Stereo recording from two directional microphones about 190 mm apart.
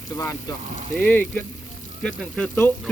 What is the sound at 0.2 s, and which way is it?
Speech, 15° left (ahead or behind).